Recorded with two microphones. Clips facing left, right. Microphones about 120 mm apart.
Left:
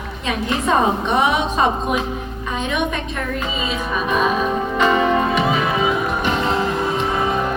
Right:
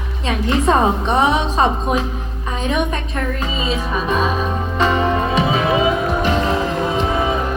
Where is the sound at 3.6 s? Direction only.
35° right (ahead or behind).